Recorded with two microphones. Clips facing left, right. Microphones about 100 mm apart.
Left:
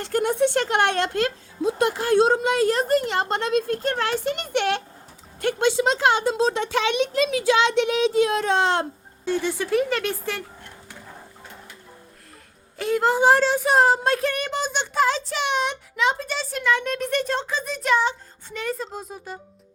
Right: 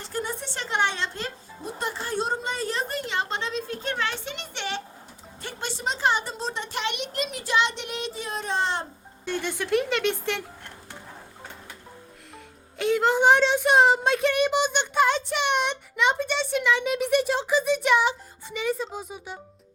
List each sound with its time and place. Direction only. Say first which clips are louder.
0.0 s speech: left 11 dB; 70° left (ahead or behind)
3.8 s a child's voice: left 6 dB; 45° left (ahead or behind)
5.4 s a child's voice: left 13 dB; 75° left (ahead or behind)
9.2 s a woman's voice: left 5 dB; 10° left (ahead or behind)
12.7 s a woman's voice: left 1 dB; 5° left (ahead or behind)